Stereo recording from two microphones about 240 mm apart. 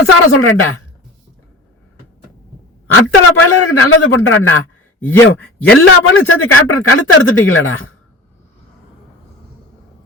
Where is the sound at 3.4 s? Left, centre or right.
Left.